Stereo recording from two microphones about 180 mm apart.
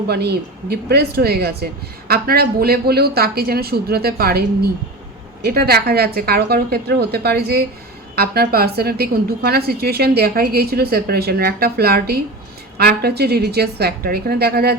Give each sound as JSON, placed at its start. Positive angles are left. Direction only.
{"t": 0.1, "sound": "a woman's voice", "side_deg": -65}